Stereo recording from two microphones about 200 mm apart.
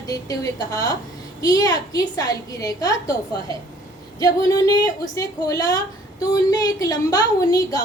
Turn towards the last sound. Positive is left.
turn(degrees=15)  # may be behind; listen again after turning